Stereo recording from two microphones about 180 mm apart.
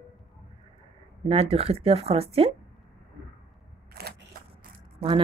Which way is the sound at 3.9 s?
60° right (ahead or behind).